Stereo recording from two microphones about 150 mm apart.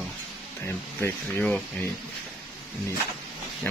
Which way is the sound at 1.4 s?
5° left (ahead or behind).